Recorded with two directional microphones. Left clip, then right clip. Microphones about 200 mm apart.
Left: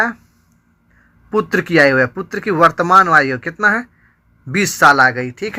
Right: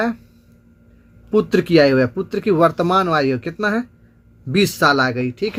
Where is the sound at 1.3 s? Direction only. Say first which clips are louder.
Left 1 dB; 10° left (ahead or behind).